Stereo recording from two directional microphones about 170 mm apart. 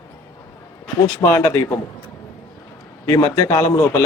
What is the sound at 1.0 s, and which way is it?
Speech, 15° left (ahead or behind).